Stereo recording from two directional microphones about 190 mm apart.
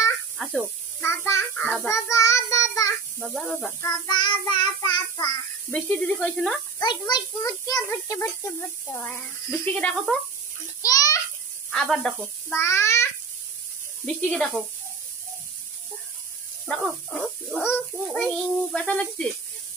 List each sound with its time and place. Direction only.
0.4 s speech: centre (ahead or behind)
1.0 s a child's voice: 15° left (ahead or behind)
2.0 s child singing: 15° left (ahead or behind)
3.2 s a child's voice: centre (ahead or behind)
3.8 s child singing: 20° left (ahead or behind)
5.7 s a child's voice: 5° left (ahead or behind)
6.8 s a child's voice: 20° left (ahead or behind)
10.8 s children playing: 20° left (ahead or behind)
11.7 s a child's voice: centre (ahead or behind)
12.5 s a child's voice: 15° left (ahead or behind)
16.6 s a child's voice: 5° left (ahead or behind)